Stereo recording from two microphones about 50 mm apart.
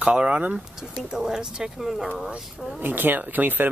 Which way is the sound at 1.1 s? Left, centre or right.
Centre.